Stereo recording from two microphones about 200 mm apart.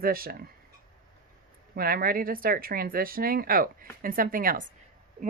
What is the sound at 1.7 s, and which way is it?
Speech, 45° right (ahead or behind).